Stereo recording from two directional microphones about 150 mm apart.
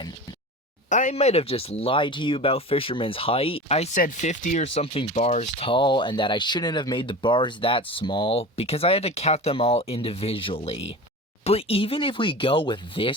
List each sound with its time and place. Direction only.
0.9 s speech: 55° left (ahead or behind); by 13.1 s 35° left (ahead or behind)